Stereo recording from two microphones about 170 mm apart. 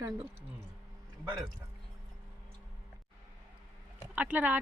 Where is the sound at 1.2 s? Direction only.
15° right (ahead or behind).